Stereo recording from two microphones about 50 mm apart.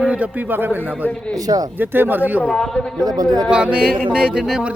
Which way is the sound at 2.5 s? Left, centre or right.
Centre.